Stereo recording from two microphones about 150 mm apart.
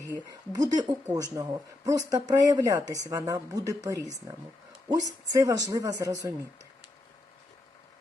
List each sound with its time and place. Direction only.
0.3 s speech: 25° right (ahead or behind)
4.9 s speech: 25° right (ahead or behind)